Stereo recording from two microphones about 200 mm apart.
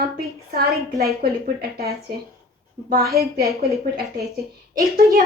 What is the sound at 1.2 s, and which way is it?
A woman's voice, 50° right (ahead or behind).